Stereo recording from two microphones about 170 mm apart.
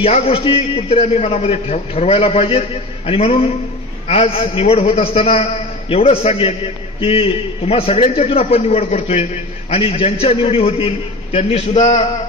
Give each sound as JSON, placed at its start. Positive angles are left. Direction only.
{"t": 0.0, "sound": "a man's voice", "side_deg": 35}